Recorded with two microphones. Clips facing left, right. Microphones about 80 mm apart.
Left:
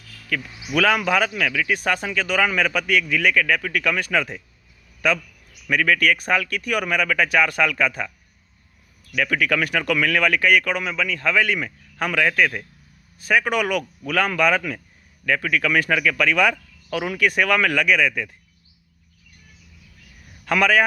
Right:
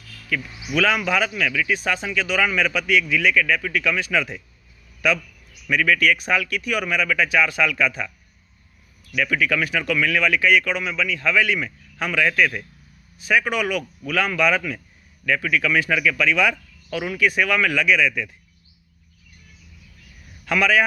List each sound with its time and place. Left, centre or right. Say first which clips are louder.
0.7 s a man's voice: left 1 dB; left
9.1 s speech: even; left
20.4 s a man's voice: left 1 dB; left